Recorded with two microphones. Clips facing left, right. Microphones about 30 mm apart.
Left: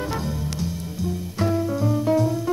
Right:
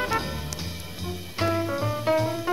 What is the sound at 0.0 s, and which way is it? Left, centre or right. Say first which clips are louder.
Music: even; right.